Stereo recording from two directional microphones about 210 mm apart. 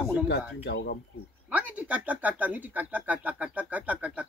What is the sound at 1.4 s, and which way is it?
Speech, 5° right (ahead or behind).